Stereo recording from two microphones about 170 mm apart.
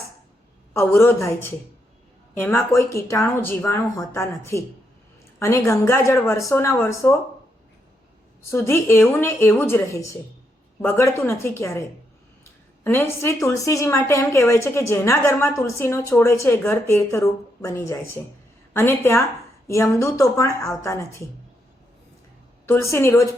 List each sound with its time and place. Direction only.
0.7 s speech: 15° left (ahead or behind)
8.4 s speech: 15° left (ahead or behind)
12.8 s speech: 10° left (ahead or behind)
22.6 s speech: 15° left (ahead or behind)